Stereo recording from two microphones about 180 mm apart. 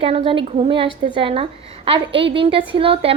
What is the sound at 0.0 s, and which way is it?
A woman's voice, 30° right (ahead or behind).